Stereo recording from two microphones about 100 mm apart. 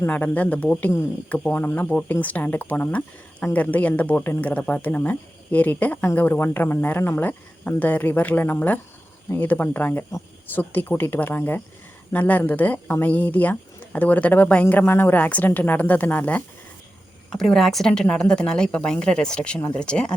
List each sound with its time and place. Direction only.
0.0 s speech: 15° left (ahead or behind)
17.3 s speech: 5° left (ahead or behind)